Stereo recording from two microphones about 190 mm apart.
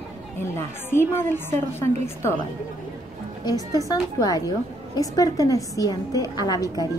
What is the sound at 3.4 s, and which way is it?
A woman's voice, 20° left (ahead or behind).